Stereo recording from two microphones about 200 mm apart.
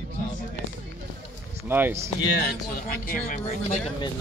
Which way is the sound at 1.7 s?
10° right (ahead or behind).